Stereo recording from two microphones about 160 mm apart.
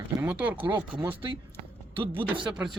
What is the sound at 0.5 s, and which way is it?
Speech, 30° right (ahead or behind).